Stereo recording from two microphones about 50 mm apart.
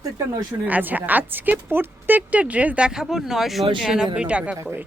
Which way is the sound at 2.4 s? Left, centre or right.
Right.